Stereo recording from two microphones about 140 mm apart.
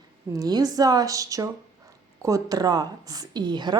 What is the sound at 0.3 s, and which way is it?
A woman's voice, 30° right (ahead or behind).